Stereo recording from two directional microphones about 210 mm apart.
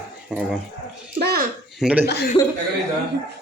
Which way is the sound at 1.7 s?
5° right (ahead or behind).